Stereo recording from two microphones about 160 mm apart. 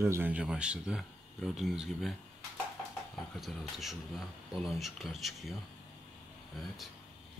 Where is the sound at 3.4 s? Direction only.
Centre (ahead or behind).